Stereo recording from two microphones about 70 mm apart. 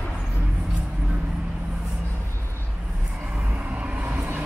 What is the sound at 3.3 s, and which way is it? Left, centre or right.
Vehicle, right.